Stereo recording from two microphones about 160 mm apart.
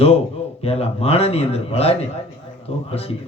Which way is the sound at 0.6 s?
40° left (ahead or behind).